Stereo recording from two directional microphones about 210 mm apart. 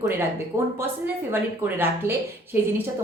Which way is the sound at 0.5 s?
10° right (ahead or behind).